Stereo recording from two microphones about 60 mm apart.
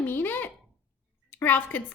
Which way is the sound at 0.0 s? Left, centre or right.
Left.